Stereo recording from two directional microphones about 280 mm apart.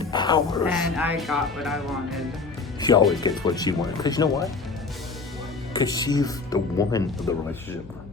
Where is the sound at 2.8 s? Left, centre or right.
Centre.